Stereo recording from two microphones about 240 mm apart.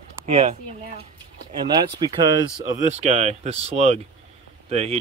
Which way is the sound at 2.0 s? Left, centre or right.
Centre.